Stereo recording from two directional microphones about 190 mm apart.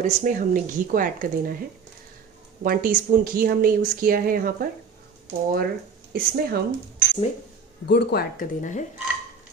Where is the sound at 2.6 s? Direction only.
45° right (ahead or behind).